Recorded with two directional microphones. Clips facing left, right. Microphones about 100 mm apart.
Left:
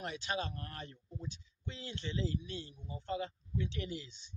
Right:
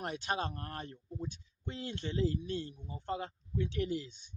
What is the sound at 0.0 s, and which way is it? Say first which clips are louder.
Speech: right 3 dB; 50° right (ahead or behind).